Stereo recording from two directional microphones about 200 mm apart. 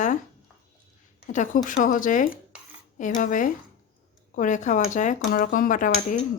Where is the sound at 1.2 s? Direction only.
40° left (ahead or behind).